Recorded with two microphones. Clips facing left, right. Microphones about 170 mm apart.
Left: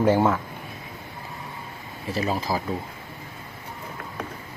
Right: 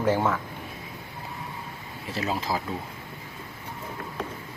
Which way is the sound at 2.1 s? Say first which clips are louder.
Left 3 dB; centre (ahead or behind).